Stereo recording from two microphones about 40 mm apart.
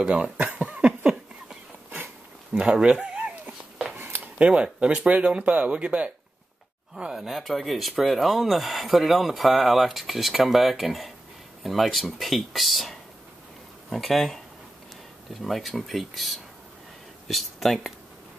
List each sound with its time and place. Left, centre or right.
0.1 s speech: right
2.6 s speech: centre
3.8 s a sound: right
4.6 s speech: right
7.2 s speech: centre
15.4 s speech: centre